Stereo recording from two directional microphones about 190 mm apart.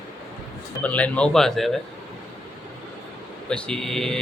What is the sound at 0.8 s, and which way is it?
Speech, 5° left (ahead or behind).